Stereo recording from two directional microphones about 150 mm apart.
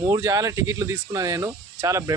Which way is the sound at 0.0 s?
20° right (ahead or behind).